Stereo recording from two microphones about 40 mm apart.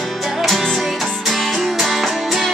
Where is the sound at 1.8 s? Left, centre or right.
Centre.